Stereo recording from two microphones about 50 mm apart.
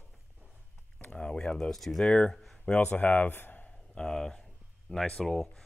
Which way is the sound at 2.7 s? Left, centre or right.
Left.